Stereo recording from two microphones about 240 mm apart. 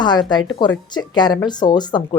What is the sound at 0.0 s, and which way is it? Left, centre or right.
Speech, centre.